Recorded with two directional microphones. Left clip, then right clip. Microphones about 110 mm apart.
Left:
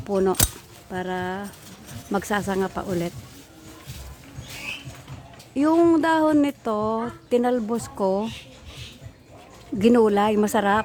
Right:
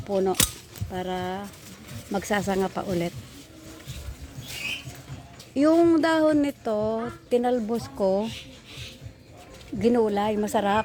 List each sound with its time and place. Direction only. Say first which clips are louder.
0.1 s speech: left 2 dB; 50° left (ahead or behind)
0.9 s speech: left 2 dB; 40° left (ahead or behind)
2.3 s speech: right 1 dB; 20° left (ahead or behind)
5.5 s speech: left 1 dB; 20° left (ahead or behind)
6.2 s speech: left 2 dB; 30° left (ahead or behind)
9.7 s speech: left 4 dB; 80° left; by 10.6 s 55° left (ahead or behind)
10.6 s speech: left 1 dB; 30° left (ahead or behind)